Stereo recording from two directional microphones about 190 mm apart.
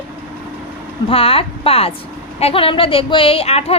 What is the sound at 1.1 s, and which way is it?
A woman's voice, 30° left (ahead or behind).